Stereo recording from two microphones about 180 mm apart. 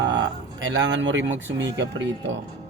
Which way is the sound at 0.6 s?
90° right.